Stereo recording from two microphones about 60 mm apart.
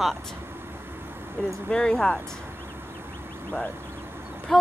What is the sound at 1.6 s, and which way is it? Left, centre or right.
Speech, centre.